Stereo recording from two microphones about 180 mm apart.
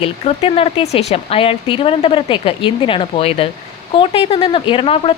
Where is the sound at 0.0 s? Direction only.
30° left (ahead or behind).